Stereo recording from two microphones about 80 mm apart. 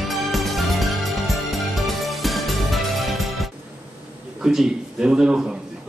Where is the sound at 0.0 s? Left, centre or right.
Centre.